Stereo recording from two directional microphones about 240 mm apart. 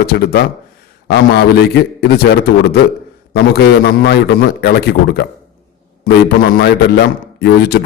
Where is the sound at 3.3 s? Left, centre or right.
Left.